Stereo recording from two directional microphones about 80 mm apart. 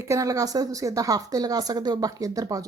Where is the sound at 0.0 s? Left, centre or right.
Right.